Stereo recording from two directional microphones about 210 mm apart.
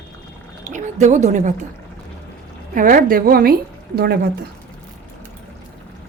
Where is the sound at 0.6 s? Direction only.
35° right (ahead or behind).